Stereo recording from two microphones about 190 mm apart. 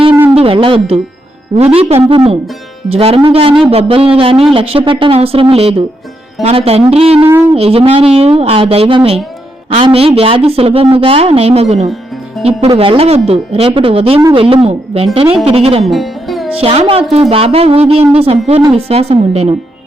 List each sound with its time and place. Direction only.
0.3 s a woman's voice: 30° right (ahead or behind)
15.8 s music: centre (ahead or behind)
16.6 s a woman's voice: 30° right (ahead or behind)